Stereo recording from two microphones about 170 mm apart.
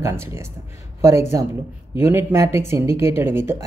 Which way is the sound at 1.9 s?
15° right (ahead or behind).